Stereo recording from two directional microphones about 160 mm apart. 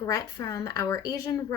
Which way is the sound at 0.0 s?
20° left (ahead or behind).